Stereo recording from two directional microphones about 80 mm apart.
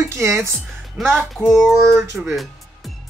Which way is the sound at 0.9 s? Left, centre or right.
Centre.